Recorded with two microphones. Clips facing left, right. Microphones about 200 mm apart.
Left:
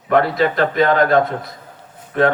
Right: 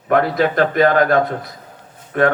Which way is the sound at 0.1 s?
55° right (ahead or behind).